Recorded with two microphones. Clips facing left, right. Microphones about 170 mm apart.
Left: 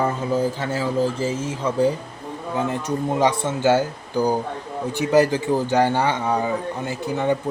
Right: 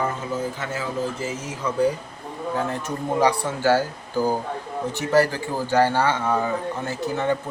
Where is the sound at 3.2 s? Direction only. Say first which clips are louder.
Left 1 dB; 25° left (ahead or behind).